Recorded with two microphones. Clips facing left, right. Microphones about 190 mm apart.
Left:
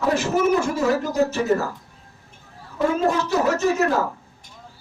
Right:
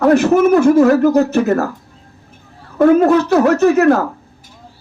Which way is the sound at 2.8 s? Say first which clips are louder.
Right 11 dB; 60° right (ahead or behind).